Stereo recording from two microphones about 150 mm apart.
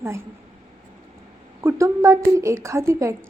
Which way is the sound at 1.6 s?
20° right (ahead or behind).